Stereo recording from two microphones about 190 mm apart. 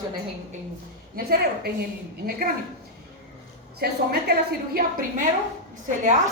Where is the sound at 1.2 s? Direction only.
55° right (ahead or behind).